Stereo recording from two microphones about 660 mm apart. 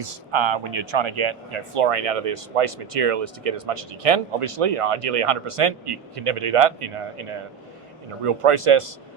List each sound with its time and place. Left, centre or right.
0.0 s speech: right